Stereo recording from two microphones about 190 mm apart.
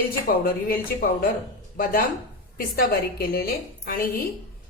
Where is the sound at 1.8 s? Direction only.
50° left (ahead or behind).